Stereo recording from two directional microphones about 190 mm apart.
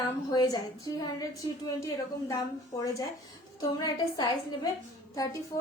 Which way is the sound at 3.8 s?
20° left (ahead or behind).